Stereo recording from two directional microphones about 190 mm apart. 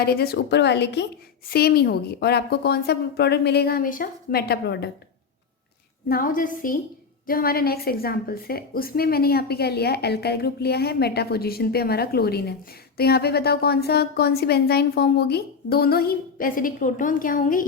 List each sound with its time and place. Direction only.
0.0 s a woman's voice: 55° left (ahead or behind)
6.1 s a woman's voice: 45° left (ahead or behind)